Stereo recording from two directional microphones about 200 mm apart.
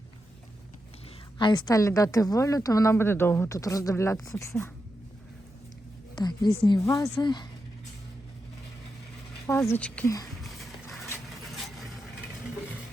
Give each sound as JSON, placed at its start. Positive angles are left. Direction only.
{"t": 1.4, "sound": "a woman's voice", "side_deg": 20}
{"t": 6.1, "sound": "a woman's voice", "side_deg": 20}
{"t": 9.6, "sound": "a woman's voice", "side_deg": 10}